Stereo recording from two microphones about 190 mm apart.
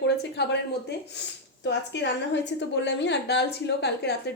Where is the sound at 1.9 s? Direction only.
70° left (ahead or behind).